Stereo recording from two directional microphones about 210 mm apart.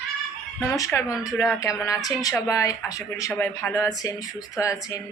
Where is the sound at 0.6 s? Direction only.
15° left (ahead or behind).